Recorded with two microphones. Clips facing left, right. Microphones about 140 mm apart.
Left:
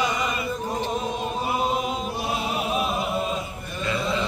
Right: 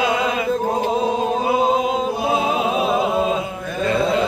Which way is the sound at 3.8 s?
50° right (ahead or behind).